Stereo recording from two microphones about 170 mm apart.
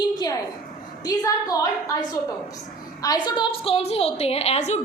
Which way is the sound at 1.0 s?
20° left (ahead or behind).